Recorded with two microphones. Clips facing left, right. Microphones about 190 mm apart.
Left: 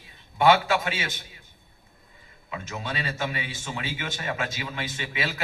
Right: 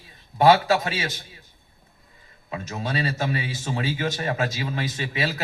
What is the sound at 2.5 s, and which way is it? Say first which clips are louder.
A man's voice: right 4 dB; 40° right (ahead or behind).